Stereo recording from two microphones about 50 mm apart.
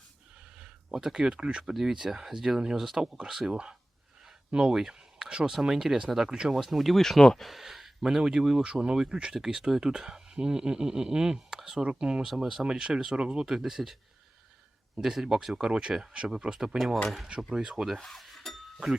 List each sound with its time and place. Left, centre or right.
0.6 s speech: centre
1.7 s speech: centre
6.5 s speech: centre
15.0 s speech: centre
16.7 s speech: centre
17.2 s speech: centre
18.0 s cutlery: centre